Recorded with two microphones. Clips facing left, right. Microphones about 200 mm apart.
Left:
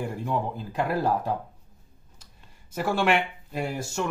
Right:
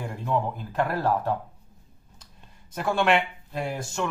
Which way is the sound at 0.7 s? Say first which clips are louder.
Even; 15° left (ahead or behind).